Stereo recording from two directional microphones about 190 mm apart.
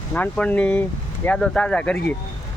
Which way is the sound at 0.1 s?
5° left (ahead or behind).